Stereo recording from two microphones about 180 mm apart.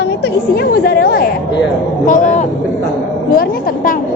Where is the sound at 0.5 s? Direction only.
60° left (ahead or behind).